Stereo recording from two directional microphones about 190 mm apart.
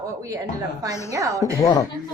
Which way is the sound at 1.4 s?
20° left (ahead or behind).